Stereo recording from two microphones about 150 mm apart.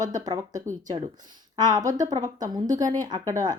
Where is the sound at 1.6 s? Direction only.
25° right (ahead or behind).